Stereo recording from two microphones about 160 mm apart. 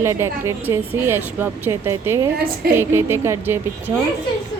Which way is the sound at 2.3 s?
65° right (ahead or behind).